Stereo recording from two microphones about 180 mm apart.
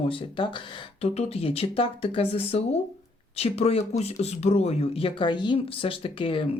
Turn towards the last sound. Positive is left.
turn(degrees=30)  # may be behind; listen again after turning